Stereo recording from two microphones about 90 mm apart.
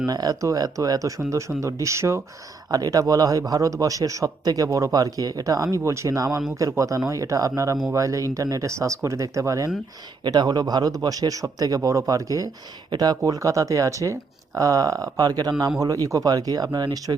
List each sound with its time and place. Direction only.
0.1 s a man's voice: 45° right (ahead or behind)
2.6 s a man's voice: 45° right (ahead or behind)
10.2 s a man's voice: 50° right (ahead or behind)